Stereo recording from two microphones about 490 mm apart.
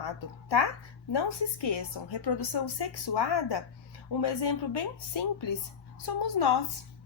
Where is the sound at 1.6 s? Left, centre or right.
Left.